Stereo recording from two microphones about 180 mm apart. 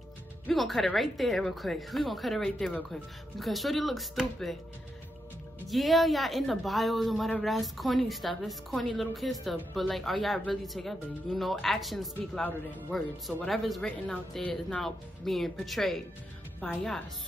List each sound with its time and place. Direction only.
0.5 s speech: centre (ahead or behind)
5.7 s speech: centre (ahead or behind)